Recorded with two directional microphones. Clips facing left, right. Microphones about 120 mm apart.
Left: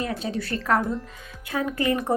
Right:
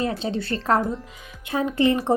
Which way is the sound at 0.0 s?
30° right (ahead or behind).